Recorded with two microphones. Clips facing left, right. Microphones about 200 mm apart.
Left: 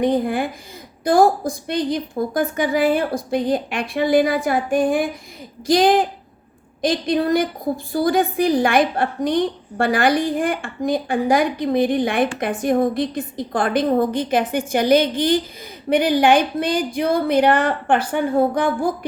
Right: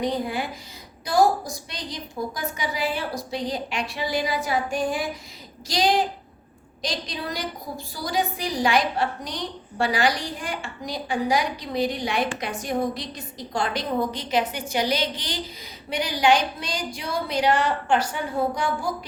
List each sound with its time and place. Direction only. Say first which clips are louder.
0.0 s a woman's voice: left 7 dB; 55° left (ahead or behind)